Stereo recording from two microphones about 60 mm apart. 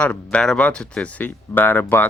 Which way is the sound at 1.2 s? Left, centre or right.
Left.